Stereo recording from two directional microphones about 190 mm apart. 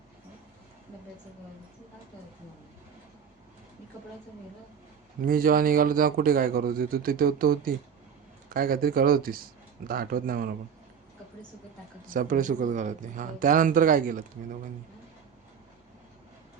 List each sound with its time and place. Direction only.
5.2 s a man's voice: 50° right (ahead or behind)
12.0 s a man's voice: 45° right (ahead or behind)